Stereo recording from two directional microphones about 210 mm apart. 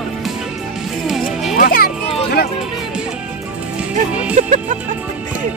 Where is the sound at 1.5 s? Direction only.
45° left (ahead or behind).